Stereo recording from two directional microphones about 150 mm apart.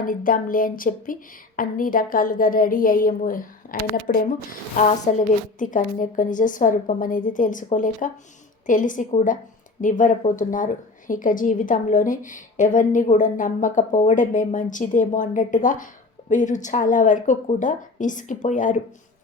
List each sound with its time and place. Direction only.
0.0 s speech: 65° left (ahead or behind)